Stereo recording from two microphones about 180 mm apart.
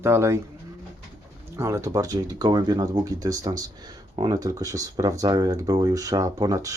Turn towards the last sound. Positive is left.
turn(degrees=-20)  # may be behind; listen again after turning